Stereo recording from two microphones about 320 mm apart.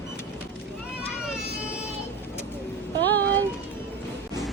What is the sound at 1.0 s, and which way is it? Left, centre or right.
Vehicle, centre.